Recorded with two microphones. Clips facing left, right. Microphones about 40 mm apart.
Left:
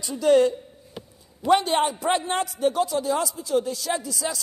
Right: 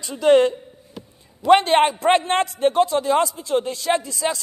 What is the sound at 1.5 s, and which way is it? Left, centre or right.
A man's voice, right.